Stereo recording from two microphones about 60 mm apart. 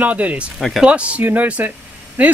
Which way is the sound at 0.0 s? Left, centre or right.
Right.